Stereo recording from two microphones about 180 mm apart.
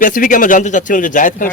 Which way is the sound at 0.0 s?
45° left (ahead or behind).